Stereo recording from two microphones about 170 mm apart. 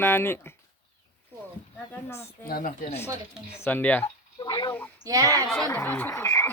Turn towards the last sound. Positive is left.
turn(degrees=15)  # may be behind; listen again after turning